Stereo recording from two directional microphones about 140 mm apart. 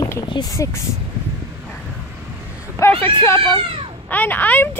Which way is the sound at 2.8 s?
20° left (ahead or behind).